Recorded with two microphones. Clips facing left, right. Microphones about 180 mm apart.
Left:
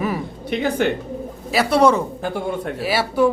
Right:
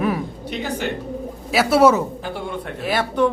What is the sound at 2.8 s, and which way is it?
Speech, 5° left (ahead or behind).